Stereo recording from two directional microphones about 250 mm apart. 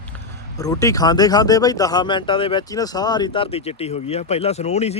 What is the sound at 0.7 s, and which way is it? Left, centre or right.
Speech, centre.